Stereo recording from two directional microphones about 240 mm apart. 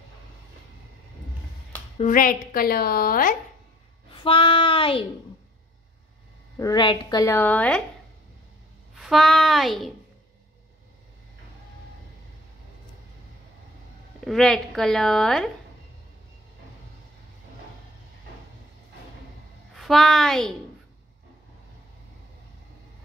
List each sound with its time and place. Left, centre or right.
2.0 s a woman's voice: left
4.1 s speech: left
6.6 s a woman's voice: centre
8.9 s a child's voice: centre
14.2 s a woman's voice: centre
19.7 s a woman's voice: centre